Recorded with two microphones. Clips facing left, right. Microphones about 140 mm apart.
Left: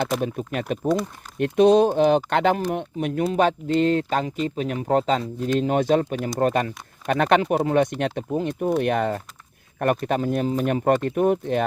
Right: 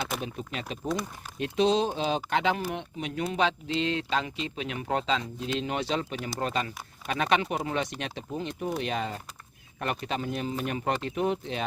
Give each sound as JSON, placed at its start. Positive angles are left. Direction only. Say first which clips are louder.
{"t": 0.2, "sound": "speech", "louder": "left 9 dB", "side_deg": 50}